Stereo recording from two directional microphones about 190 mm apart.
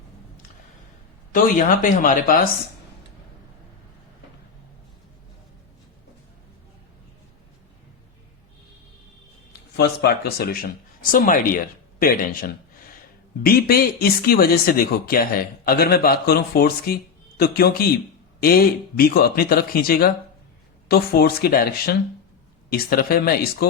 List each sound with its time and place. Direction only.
1.3 s speech: 45° left (ahead or behind)
9.5 s speech: 60° left (ahead or behind)